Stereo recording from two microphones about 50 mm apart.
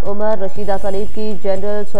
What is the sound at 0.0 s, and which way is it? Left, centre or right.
Speech, left.